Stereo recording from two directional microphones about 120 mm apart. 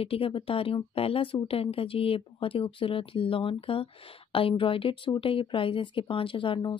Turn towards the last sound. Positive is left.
turn(degrees=40)  # may be behind; listen again after turning